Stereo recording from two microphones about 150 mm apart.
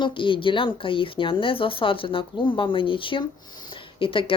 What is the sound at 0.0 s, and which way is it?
Speech, 35° left (ahead or behind).